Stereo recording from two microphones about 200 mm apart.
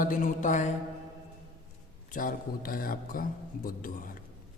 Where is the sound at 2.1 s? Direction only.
45° left (ahead or behind).